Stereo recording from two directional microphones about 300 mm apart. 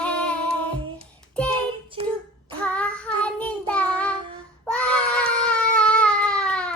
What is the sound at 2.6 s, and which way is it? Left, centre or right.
Child singing, centre.